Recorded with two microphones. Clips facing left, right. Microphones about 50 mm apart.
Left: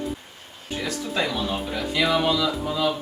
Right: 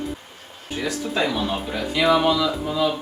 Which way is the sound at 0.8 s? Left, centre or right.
Centre.